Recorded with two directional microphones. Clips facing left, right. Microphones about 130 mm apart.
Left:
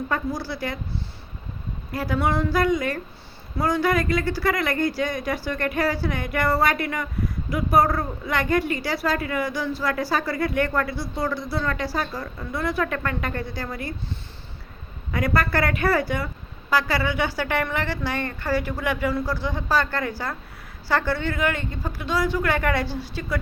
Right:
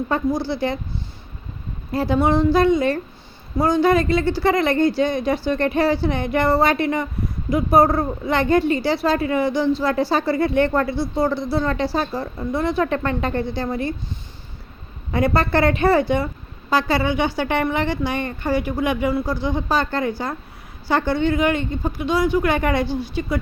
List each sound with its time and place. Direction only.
0.1 s a woman's voice: 25° right (ahead or behind)
15.1 s a woman's voice: 25° right (ahead or behind)